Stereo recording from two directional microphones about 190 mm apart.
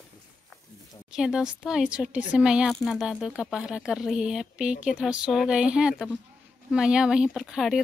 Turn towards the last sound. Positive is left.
turn(degrees=0)  # may be behind; listen again after turning